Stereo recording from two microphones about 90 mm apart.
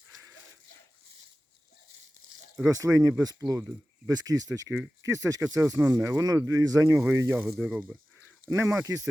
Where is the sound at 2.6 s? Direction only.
35° right (ahead or behind).